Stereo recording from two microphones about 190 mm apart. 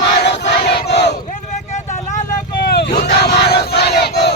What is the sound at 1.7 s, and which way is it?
Vehicle, 40° left (ahead or behind).